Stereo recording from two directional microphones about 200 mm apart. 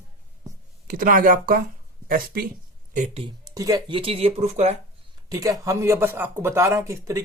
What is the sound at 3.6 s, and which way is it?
Speech, 15° right (ahead or behind).